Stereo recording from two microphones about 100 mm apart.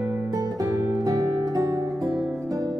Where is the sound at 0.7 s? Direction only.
35° right (ahead or behind).